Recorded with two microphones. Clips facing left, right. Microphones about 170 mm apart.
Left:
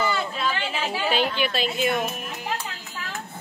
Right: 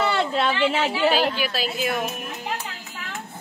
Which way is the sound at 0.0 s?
70° right (ahead or behind).